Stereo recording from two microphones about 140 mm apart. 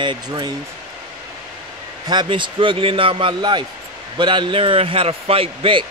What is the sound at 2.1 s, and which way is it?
Speech, 35° right (ahead or behind).